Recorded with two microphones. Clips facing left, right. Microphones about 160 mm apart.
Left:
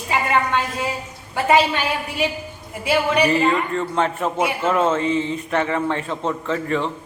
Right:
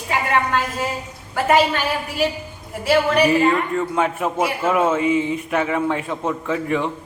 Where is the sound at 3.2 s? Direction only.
5° right (ahead or behind).